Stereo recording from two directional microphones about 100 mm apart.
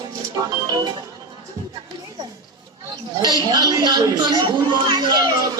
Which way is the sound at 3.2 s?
45° right (ahead or behind).